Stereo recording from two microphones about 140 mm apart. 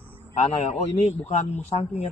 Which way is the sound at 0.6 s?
55° left (ahead or behind).